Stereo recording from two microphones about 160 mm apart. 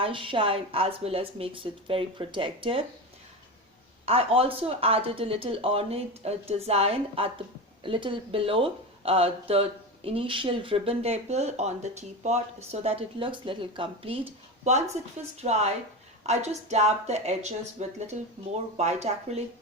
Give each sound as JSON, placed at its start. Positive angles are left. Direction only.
{"t": 0.0, "sound": "speech", "side_deg": -30}
{"t": 4.0, "sound": "speech", "side_deg": -40}
{"t": 15.4, "sound": "speech", "side_deg": -45}